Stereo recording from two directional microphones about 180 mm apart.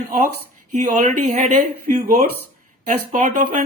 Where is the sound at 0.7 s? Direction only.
45° right (ahead or behind).